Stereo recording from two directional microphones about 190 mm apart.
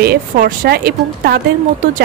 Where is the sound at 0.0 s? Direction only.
55° right (ahead or behind).